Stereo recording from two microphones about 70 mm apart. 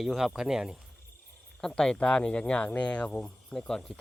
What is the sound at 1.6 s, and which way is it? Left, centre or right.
Speech, centre.